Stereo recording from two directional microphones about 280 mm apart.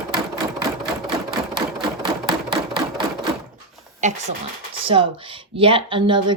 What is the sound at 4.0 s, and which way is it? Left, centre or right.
Speech, right.